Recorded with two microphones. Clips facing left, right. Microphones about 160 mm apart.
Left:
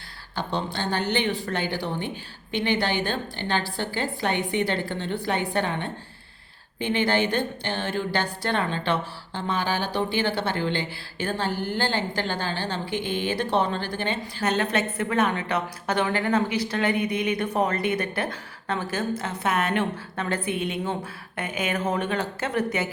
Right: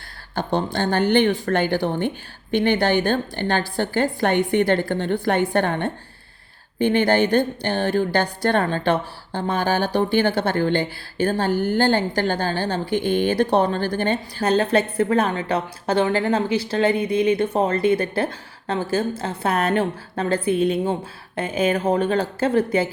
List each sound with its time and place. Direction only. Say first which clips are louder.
0.3 s a woman's voice: right 6 dB; 50° right (ahead or behind); by 22.9 s 30° right (ahead or behind)